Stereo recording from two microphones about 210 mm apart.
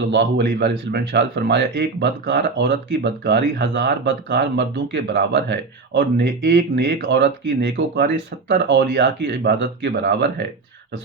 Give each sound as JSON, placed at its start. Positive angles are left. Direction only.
{"t": 0.1, "sound": "speech", "side_deg": -55}